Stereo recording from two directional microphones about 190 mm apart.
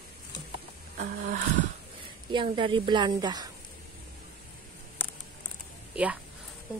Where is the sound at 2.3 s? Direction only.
25° right (ahead or behind).